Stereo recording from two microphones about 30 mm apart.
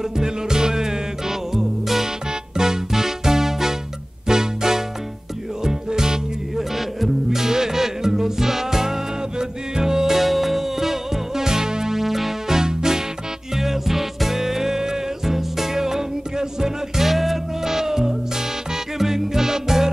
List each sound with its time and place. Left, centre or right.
0.2 s music: right
1.6 s music: centre
2.5 s music: centre
6.5 s music: centre
17.6 s music: centre